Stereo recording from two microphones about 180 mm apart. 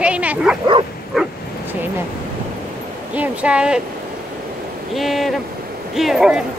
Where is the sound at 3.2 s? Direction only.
5° right (ahead or behind).